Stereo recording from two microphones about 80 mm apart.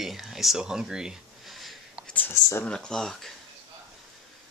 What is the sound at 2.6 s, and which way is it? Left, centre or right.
Speech, centre.